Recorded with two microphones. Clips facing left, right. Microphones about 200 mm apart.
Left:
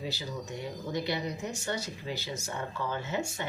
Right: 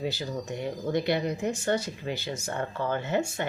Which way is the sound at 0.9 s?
55° right (ahead or behind).